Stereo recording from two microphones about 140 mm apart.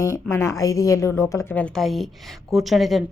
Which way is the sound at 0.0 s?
20° left (ahead or behind).